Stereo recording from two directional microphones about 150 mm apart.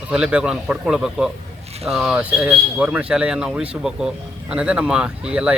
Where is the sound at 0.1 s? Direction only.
5° right (ahead or behind).